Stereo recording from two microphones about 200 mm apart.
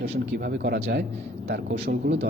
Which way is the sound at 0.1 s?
50° right (ahead or behind).